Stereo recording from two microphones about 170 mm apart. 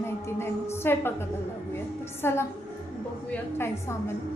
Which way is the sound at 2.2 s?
15° left (ahead or behind).